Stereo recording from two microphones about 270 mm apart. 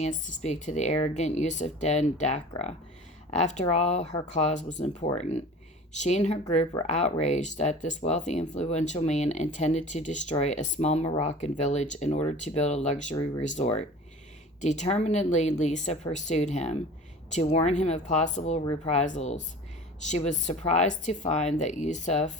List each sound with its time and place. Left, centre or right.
0.0 s speech: left